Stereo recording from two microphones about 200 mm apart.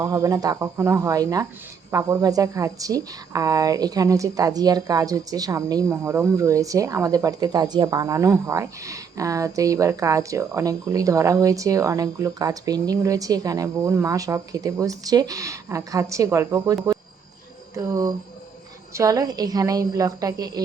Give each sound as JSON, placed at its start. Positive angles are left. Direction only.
{"t": 0.0, "sound": "a woman's voice", "side_deg": -15}
{"t": 18.9, "sound": "a woman's voice", "side_deg": -15}